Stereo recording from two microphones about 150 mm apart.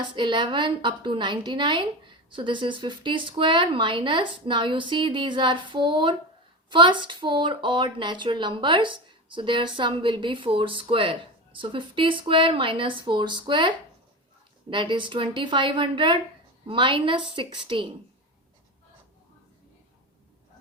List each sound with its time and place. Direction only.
0.2 s speech: 30° right (ahead or behind)